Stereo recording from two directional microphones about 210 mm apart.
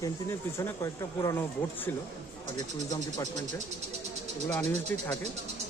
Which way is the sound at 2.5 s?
20° left (ahead or behind).